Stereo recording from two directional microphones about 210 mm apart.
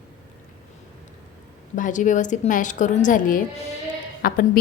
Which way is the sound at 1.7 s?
35° left (ahead or behind).